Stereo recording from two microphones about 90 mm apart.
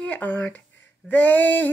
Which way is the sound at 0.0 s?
15° left (ahead or behind).